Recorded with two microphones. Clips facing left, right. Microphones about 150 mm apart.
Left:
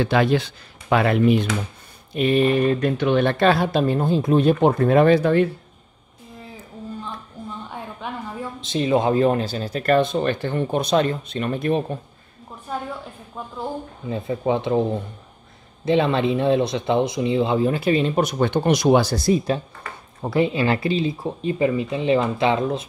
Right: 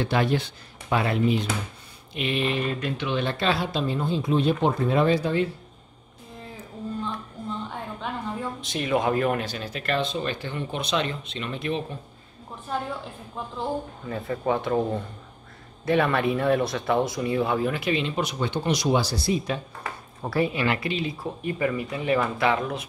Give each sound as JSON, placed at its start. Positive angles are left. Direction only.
{"t": 0.0, "sound": "speech", "side_deg": 90}
{"t": 2.1, "sound": "speech", "side_deg": 45}
{"t": 8.5, "sound": "speech", "side_deg": 25}
{"t": 12.7, "sound": "a woman's voice", "side_deg": 0}
{"t": 14.0, "sound": "speech", "side_deg": 15}
{"t": 20.2, "sound": "speech", "side_deg": 20}